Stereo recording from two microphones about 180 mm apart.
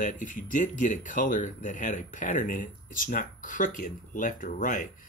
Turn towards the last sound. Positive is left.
turn(degrees=45)  # may be behind; listen again after turning